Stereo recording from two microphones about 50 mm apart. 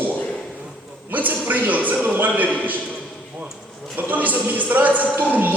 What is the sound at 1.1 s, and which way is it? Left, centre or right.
A man's voice, right.